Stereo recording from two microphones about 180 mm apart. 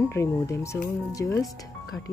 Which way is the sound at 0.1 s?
15° left (ahead or behind).